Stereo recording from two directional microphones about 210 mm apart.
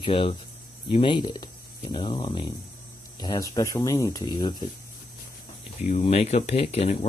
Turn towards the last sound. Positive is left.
turn(degrees=30)  # may be behind; listen again after turning